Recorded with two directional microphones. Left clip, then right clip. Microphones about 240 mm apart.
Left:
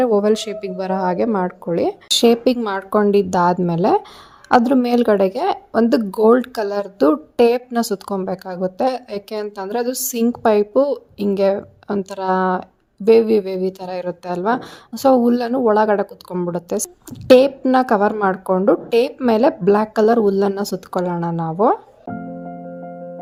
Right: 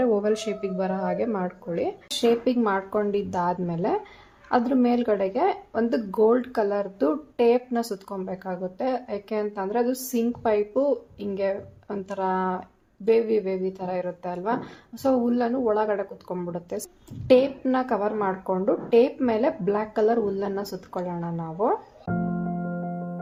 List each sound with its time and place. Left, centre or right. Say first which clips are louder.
0.0 s speech: left 7 dB; left